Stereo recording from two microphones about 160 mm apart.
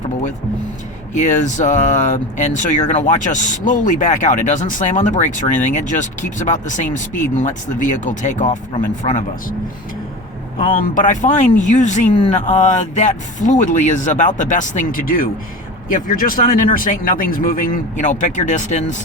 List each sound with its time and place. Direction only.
1.1 s speech: 50° left (ahead or behind)
10.9 s speech: 50° left (ahead or behind)